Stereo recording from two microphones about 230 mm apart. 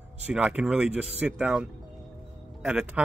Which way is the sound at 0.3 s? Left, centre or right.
Centre.